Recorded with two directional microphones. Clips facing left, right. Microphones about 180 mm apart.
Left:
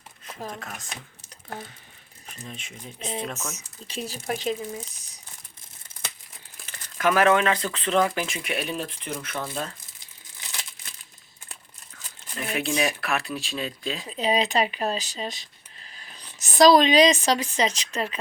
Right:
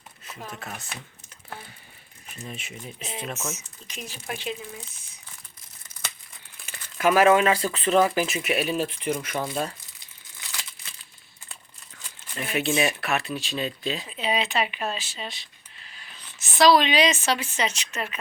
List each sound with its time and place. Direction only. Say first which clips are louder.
2.5 s speech: right 3 dB; 5° right (ahead or behind)
3.8 s speech: left 6 dB; 35° left (ahead or behind)
6.7 s speech: right 2 dB; 10° right (ahead or behind)
12.4 s speech: right 1 dB; centre (ahead or behind)
14.1 s speech: left 5 dB; 35° left (ahead or behind)